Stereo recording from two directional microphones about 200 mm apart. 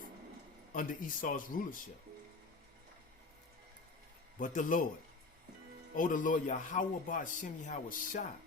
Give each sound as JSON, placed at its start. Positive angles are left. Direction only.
{"t": 0.7, "sound": "speech", "side_deg": 40}
{"t": 4.4, "sound": "a man's voice", "side_deg": 40}
{"t": 5.9, "sound": "a man's voice", "side_deg": 40}